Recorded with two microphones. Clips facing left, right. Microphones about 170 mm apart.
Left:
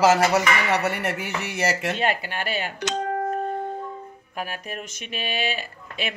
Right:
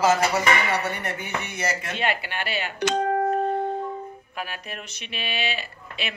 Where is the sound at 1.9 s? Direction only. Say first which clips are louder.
Left 2 dB; 40° left (ahead or behind).